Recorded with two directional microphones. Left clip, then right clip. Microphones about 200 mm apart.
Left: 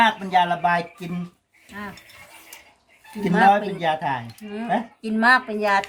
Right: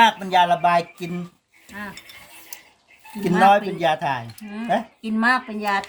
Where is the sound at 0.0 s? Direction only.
55° right (ahead or behind).